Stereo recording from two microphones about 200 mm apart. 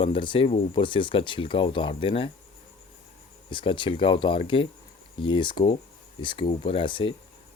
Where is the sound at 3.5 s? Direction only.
25° left (ahead or behind).